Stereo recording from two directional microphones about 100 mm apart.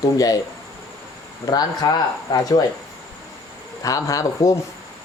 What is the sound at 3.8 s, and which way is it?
Speech, 35° left (ahead or behind).